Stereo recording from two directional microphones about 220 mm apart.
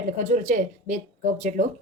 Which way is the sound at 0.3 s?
35° right (ahead or behind).